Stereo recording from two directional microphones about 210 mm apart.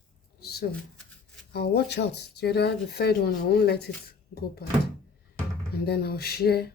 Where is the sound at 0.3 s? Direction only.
50° left (ahead or behind).